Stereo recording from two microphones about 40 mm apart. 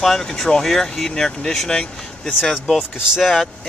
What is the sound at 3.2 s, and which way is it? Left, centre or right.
Speech, centre.